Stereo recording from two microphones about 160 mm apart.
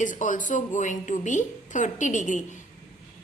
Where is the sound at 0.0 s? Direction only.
55° left (ahead or behind).